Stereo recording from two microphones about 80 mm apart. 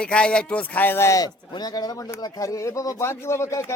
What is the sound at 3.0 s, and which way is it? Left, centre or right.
Speech, left.